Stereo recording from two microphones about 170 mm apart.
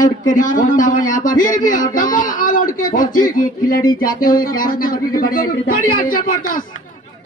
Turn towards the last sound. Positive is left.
turn(degrees=55)  # may be behind; listen again after turning